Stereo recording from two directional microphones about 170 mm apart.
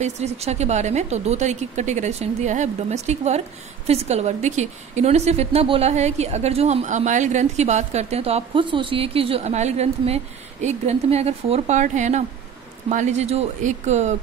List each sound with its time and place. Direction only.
0.0 s a woman's voice: 40° right (ahead or behind)